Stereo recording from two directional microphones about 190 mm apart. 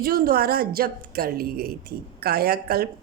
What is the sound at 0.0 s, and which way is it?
A woman's voice, 50° right (ahead or behind).